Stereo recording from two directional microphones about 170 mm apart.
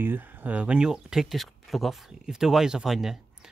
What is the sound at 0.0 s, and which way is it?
Speech, 10° right (ahead or behind).